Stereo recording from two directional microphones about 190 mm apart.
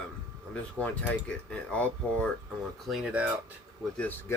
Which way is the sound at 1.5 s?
5° left (ahead or behind).